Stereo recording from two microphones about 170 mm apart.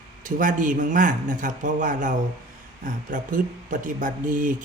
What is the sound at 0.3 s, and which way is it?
Speech, 50° right (ahead or behind).